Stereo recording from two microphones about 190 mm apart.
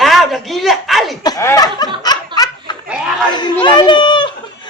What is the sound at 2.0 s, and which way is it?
Laughter, 20° left (ahead or behind).